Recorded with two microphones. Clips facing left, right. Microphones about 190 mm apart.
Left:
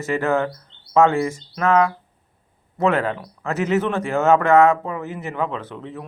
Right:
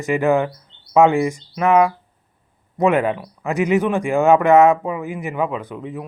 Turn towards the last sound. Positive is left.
turn(degrees=-15)  # may be behind; listen again after turning